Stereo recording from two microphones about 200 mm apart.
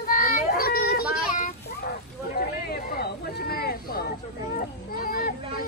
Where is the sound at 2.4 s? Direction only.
50° left (ahead or behind).